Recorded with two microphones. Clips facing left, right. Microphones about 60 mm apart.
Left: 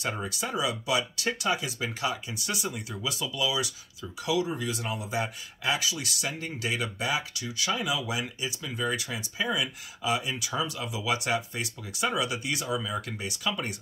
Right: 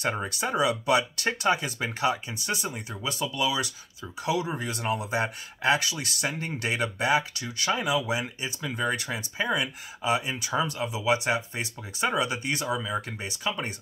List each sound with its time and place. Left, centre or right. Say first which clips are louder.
0.1 s speech: right 3 dB; right
8.1 s speech: right 2 dB; right